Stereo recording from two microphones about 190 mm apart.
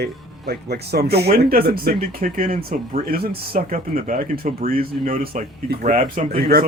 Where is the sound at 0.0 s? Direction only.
55° right (ahead or behind).